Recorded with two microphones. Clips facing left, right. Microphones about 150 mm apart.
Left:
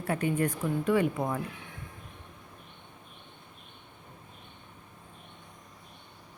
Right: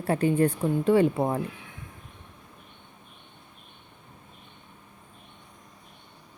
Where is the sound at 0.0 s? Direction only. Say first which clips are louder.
Right 6 dB; 30° right (ahead or behind).